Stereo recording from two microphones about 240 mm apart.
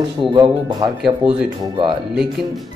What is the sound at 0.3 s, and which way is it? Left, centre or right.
Speech, centre.